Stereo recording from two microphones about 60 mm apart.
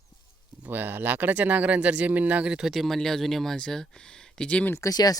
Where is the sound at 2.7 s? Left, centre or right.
Centre.